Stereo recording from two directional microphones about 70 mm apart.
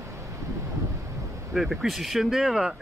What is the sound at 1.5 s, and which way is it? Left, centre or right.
Speech, centre.